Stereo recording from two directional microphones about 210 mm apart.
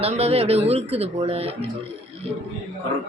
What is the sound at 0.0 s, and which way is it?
Speech, 30° right (ahead or behind).